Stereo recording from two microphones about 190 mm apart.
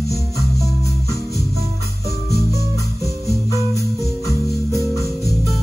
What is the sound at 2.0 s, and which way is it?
Music, 15° left (ahead or behind).